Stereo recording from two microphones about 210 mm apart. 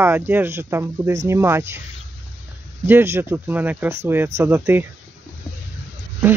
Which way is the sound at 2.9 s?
10° right (ahead or behind).